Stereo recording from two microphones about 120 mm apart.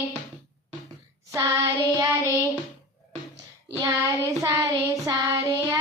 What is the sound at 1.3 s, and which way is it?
Child singing, 25° right (ahead or behind).